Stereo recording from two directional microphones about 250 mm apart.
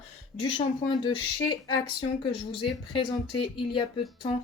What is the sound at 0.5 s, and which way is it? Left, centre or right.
Speech, left.